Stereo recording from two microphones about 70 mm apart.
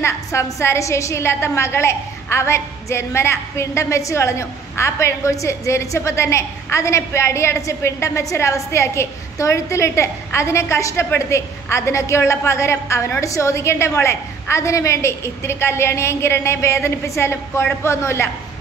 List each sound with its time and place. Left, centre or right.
0.0 s a woman's voice: left